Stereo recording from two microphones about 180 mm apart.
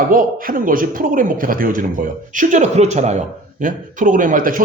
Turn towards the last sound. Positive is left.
turn(degrees=-50)  # may be behind; listen again after turning